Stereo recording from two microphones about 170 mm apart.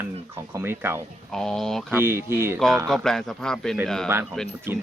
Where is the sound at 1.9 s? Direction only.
15° right (ahead or behind).